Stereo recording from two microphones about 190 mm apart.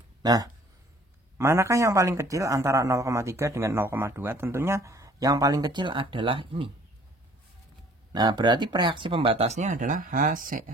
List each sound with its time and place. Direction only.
0.2 s speech: 20° right (ahead or behind)
8.1 s speech: 25° right (ahead or behind); by 10.6 s 45° right (ahead or behind)